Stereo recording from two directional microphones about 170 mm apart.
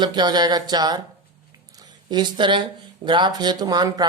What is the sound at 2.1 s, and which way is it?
Speech, 25° right (ahead or behind).